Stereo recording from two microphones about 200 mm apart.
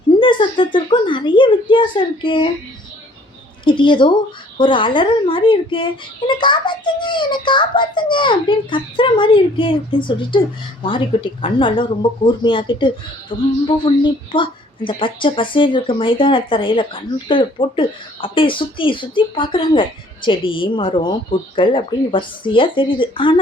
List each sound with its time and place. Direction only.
0.2 s a woman's voice: 25° left (ahead or behind)
3.6 s a woman's voice: 25° left (ahead or behind)